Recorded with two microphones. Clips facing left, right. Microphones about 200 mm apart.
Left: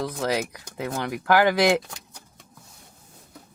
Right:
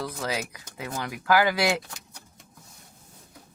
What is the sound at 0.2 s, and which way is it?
Speech, 50° left (ahead or behind).